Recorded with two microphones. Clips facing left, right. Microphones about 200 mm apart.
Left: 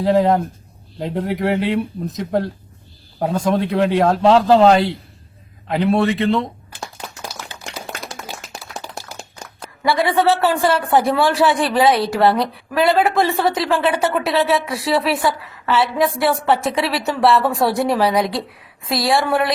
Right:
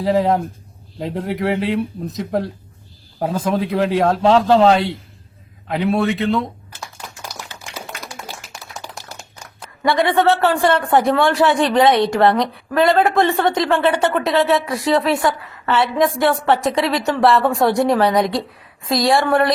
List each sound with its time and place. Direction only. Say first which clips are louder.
0.0 s speech: left 1 dB; centre (ahead or behind)
8.9 s a sound: left 3 dB; 5° right (ahead or behind)
9.8 s speech: right 1 dB; centre (ahead or behind)